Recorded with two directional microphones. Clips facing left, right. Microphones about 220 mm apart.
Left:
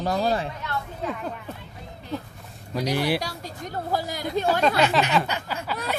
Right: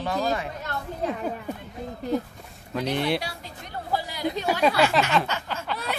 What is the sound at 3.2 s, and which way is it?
Speech, 45° left (ahead or behind).